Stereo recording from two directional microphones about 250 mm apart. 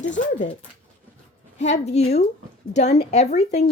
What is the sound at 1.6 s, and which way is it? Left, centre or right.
Speech, left.